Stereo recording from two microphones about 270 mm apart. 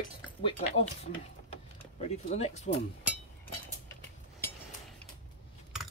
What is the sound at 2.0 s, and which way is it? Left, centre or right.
Speech, left.